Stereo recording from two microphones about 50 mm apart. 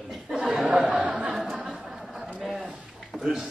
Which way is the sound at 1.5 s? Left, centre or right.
Centre.